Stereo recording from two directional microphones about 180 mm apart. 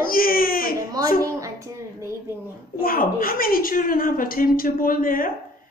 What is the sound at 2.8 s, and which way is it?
A woman's voice, 55° left (ahead or behind).